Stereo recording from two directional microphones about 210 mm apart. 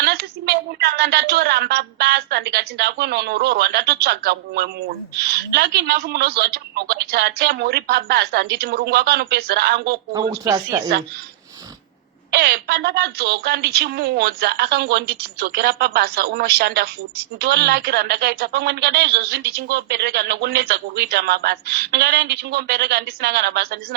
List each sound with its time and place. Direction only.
0.0 s a woman's voice: 50° right (ahead or behind)
10.4 s a woman's voice: 15° right (ahead or behind)
12.3 s a woman's voice: 50° right (ahead or behind)